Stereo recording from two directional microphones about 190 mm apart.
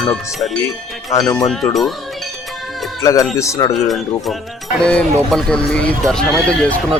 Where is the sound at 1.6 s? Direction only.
15° left (ahead or behind).